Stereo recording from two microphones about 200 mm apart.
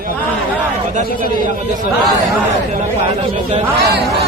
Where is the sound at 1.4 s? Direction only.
40° right (ahead or behind).